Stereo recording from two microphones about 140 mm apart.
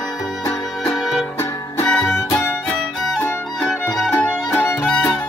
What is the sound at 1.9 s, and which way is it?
Music, 5° left (ahead or behind).